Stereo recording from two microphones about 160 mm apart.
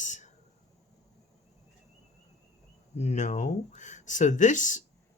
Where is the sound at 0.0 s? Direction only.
50° left (ahead or behind).